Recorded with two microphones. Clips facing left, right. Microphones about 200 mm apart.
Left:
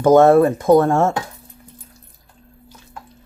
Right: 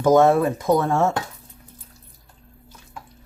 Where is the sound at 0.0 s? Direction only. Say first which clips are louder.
Left 5 dB; 55° left (ahead or behind).